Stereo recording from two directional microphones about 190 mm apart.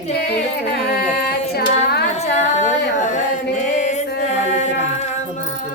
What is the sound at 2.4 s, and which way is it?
Singing, 40° left (ahead or behind).